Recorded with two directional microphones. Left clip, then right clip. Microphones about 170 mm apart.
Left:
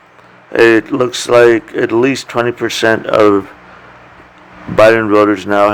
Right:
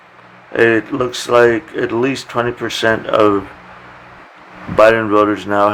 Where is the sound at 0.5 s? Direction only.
45° left (ahead or behind).